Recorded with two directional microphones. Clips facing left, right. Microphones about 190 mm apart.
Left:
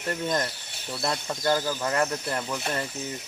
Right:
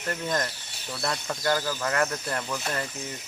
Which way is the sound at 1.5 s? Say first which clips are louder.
Left 2 dB; 15° left (ahead or behind).